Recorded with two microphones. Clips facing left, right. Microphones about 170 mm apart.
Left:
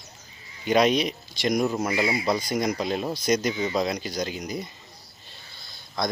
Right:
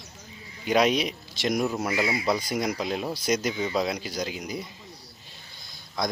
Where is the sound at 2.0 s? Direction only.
30° left (ahead or behind).